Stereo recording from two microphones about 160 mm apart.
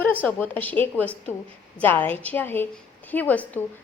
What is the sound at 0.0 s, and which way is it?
A woman's voice, 10° left (ahead or behind).